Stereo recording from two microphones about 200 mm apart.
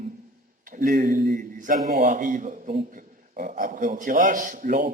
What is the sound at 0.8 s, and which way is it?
A man's voice, 45° right (ahead or behind).